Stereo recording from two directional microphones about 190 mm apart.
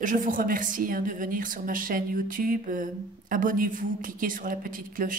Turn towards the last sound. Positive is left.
turn(degrees=-45)  # may be behind; listen again after turning